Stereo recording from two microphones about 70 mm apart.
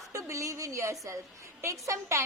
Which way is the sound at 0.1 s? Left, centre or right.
Right.